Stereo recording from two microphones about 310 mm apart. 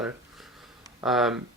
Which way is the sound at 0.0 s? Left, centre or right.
Centre.